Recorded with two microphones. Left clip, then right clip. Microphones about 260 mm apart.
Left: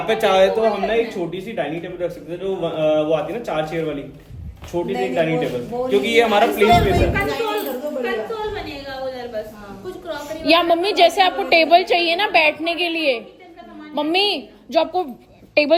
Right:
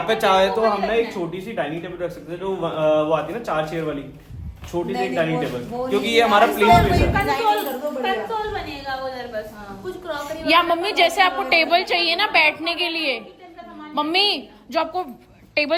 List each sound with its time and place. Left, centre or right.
0.0 s a man's voice: centre